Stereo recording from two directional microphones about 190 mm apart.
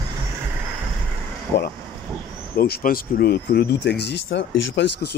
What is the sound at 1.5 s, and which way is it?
Speech, 60° left (ahead or behind).